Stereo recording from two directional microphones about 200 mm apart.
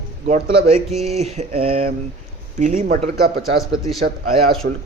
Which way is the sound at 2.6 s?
40° right (ahead or behind).